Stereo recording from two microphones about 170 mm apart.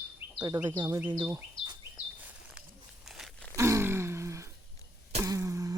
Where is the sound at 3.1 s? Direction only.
Centre (ahead or behind).